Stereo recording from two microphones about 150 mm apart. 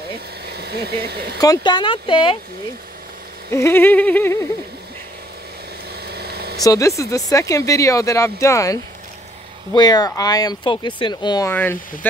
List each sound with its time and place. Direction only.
0.5 s speech: 90° right
1.4 s speech: 25° left (ahead or behind)
3.5 s a sound: 15° left (ahead or behind)
6.0 s vehicle: 90° right
6.6 s speech: 20° left (ahead or behind)
9.8 s speech: 25° left (ahead or behind)
11.4 s a sound: 15° left (ahead or behind)